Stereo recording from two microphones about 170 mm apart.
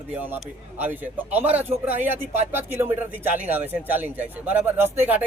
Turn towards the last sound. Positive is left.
turn(degrees=-10)  # may be behind; listen again after turning